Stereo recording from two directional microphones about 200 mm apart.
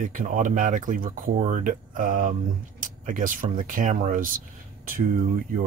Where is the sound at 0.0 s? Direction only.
40° right (ahead or behind).